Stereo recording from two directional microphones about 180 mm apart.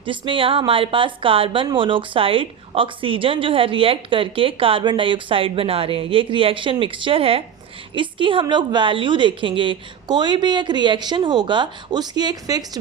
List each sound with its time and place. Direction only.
0.0 s speech: 30° right (ahead or behind)